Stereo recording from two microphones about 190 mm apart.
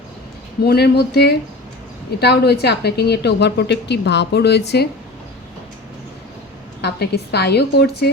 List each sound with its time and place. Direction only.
0.6 s a woman's voice: 55° left (ahead or behind)
6.8 s a woman's voice: 60° left (ahead or behind)